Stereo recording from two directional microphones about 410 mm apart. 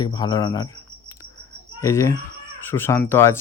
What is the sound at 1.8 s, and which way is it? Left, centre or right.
Speech, centre.